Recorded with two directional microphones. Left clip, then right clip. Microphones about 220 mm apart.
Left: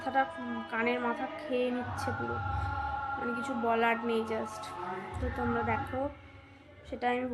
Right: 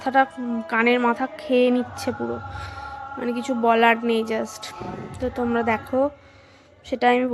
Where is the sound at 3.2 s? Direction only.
45° right (ahead or behind).